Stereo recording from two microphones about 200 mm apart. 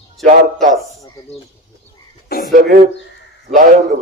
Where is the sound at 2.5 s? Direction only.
40° right (ahead or behind).